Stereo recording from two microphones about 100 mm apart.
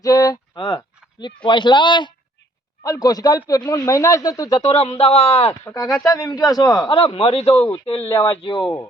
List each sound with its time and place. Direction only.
0.0 s speech: 35° left (ahead or behind)
0.5 s a man's voice: 50° left (ahead or behind)
2.8 s speech: 35° left (ahead or behind)
4.7 s a man's voice: 85° left
5.7 s speech: 40° left (ahead or behind)
6.9 s a man's voice: 70° left (ahead or behind); by 7.7 s 90° left
8.3 s speech: 65° left (ahead or behind)